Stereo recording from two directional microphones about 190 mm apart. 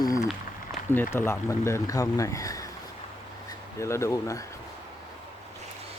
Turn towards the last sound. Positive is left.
turn(degrees=15)  # may be behind; listen again after turning